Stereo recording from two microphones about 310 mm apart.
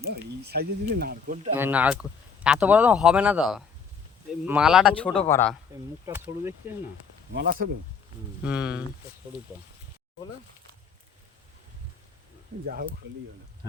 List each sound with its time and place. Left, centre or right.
0.0 s speech: right
1.5 s speech: centre
6.1 s speech: centre
7.3 s speech: right
8.4 s speech: centre